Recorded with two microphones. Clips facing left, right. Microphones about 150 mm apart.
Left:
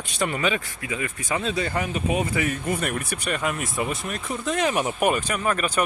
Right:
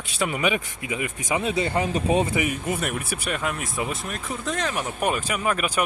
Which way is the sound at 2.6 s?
5° right (ahead or behind).